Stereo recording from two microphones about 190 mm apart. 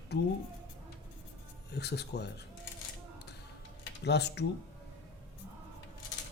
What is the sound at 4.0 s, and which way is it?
Speech, 60° left (ahead or behind).